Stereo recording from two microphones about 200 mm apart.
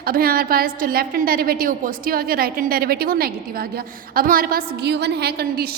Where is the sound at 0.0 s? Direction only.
50° right (ahead or behind).